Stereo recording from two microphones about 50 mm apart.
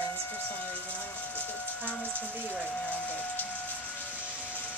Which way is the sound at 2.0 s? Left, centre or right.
Left.